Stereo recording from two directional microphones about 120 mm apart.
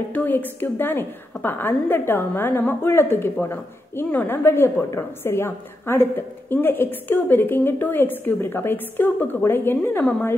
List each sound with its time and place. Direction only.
0.1 s a woman's voice: 15° left (ahead or behind)